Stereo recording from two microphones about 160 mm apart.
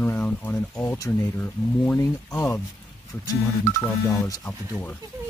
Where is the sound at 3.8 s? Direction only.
20° left (ahead or behind).